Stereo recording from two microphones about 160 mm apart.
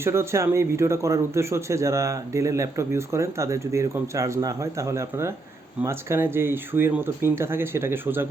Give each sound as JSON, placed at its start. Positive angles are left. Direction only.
{"t": 0.0, "sound": "a man's voice", "side_deg": -15}